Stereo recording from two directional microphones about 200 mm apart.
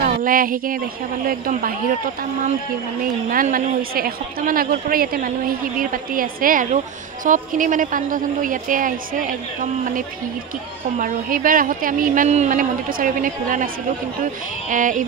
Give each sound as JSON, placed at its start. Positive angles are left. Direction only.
{"t": 0.0, "sound": "a woman's voice", "side_deg": -45}
{"t": 3.3, "sound": "a woman's voice", "side_deg": -45}
{"t": 11.0, "sound": "speech", "side_deg": -45}
{"t": 14.7, "sound": "speech", "side_deg": -40}